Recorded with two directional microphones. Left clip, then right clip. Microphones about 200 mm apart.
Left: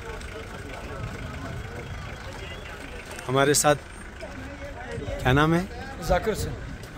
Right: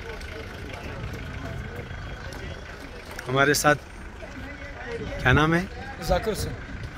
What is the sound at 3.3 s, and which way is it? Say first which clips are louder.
Speech: right 1 dB; 20° left (ahead or behind).